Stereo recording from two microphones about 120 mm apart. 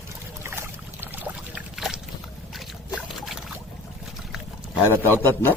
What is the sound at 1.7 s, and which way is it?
Boat, 5° right (ahead or behind).